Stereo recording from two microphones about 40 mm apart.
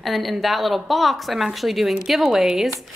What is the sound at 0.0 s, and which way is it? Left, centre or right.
Speech, centre.